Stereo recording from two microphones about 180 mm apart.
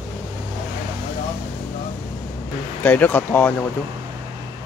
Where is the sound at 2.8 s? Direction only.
10° left (ahead or behind).